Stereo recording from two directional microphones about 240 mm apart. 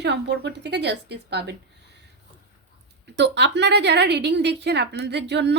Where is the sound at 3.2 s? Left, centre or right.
Right.